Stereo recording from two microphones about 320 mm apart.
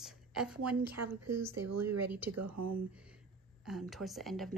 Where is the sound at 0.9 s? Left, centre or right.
Right.